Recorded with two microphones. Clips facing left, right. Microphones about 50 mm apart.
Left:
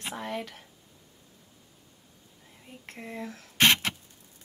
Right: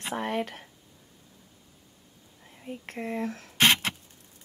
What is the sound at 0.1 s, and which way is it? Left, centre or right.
Speech, right.